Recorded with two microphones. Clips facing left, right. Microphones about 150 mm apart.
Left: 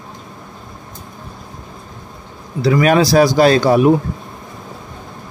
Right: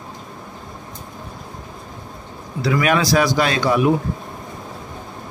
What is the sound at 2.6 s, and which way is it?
A man's voice, 35° left (ahead or behind).